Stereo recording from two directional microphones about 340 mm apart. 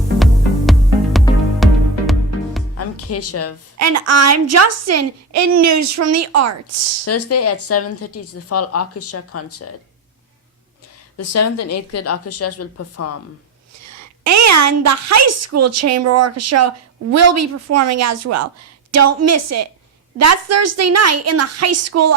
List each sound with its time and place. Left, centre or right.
0.2 s music: centre
2.7 s music: left
3.8 s a woman's voice: right
7.0 s speech: left
11.2 s speech: left
13.9 s a woman's voice: right